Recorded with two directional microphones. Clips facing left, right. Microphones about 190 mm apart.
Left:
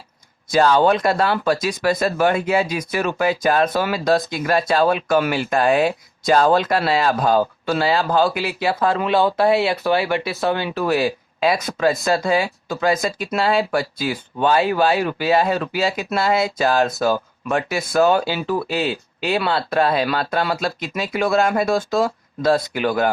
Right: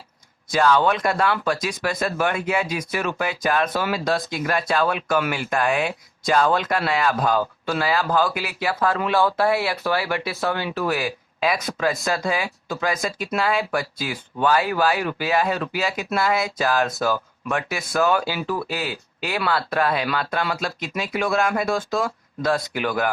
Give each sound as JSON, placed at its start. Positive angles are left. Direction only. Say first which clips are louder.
{"t": 0.5, "sound": "speech", "louder": "left 4 dB", "side_deg": 35}